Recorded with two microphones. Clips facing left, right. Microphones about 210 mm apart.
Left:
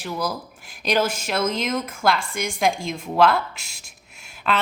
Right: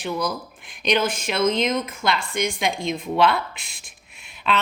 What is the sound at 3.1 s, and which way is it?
Speech, centre (ahead or behind).